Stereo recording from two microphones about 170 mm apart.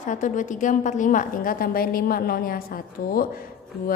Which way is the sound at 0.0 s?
50° left (ahead or behind).